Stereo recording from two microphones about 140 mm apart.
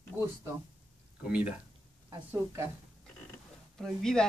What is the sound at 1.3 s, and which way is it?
Speech, 10° right (ahead or behind).